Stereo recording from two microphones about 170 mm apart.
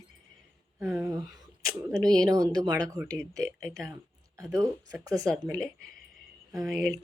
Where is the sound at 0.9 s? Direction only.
15° right (ahead or behind).